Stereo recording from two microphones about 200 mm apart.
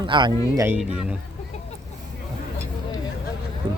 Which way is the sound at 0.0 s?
25° right (ahead or behind).